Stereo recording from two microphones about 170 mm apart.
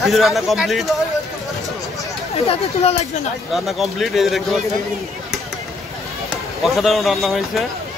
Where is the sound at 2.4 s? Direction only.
35° left (ahead or behind).